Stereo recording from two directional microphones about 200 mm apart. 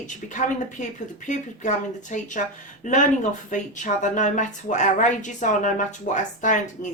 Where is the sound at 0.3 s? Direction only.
40° left (ahead or behind).